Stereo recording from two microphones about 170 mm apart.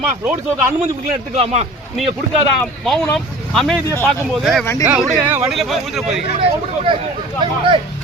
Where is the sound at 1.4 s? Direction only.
40° right (ahead or behind).